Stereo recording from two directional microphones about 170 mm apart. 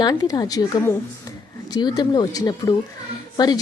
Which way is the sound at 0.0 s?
20° left (ahead or behind).